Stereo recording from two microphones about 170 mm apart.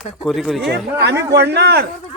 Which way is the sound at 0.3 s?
Centre (ahead or behind).